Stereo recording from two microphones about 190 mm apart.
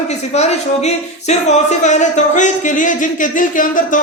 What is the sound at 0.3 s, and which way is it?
A man's voice, 35° left (ahead or behind).